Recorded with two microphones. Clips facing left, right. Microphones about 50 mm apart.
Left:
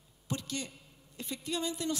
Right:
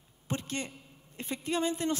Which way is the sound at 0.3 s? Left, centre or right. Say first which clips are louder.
Right 2 dB; right.